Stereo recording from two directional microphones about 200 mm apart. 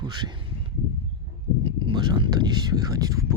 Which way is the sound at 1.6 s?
25° right (ahead or behind).